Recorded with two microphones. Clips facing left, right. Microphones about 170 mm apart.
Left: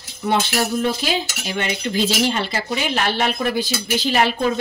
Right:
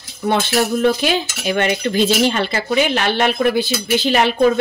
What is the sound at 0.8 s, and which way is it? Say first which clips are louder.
Cutlery: right 5 dB; 60° right (ahead or behind).